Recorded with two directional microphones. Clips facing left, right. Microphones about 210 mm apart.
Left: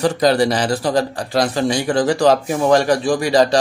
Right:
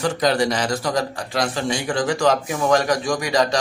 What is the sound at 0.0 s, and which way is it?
A man's voice, 35° left (ahead or behind).